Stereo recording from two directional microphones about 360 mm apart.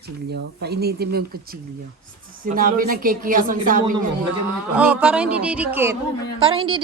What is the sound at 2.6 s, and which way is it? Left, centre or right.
A woman's voice, right.